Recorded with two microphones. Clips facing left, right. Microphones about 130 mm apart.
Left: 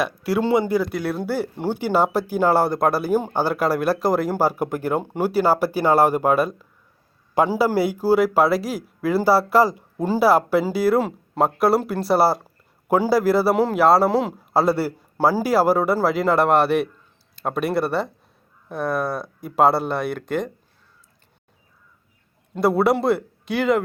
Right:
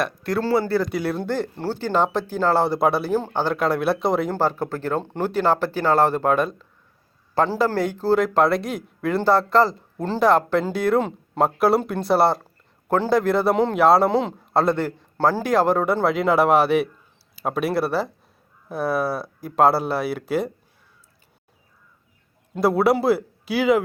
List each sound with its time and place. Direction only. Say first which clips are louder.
0.0 s speech: left 2 dB; 5° left (ahead or behind)
0.4 s a man's voice: left 1 dB; 20° left (ahead or behind)
0.8 s a man's voice: even; centre (ahead or behind)
2.6 s a man's voice: even; centre (ahead or behind)
3.1 s a man's voice: left 2 dB; 10° left (ahead or behind); by 20.5 s 5° right (ahead or behind)
22.5 s a man's voice: even; centre (ahead or behind)